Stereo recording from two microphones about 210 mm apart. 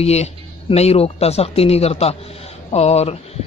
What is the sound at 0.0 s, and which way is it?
Speech, 30° left (ahead or behind).